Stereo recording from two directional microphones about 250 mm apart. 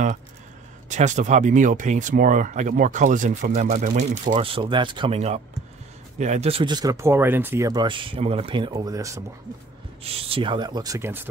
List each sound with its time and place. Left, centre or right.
0.8 s speech: right; by 11.2 s centre